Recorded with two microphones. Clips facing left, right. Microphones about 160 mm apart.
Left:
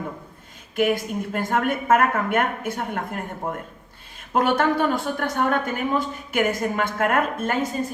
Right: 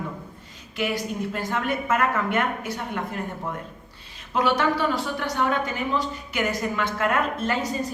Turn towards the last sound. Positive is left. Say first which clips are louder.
# left 2 dB
turn(degrees=50)  # may be behind; listen again after turning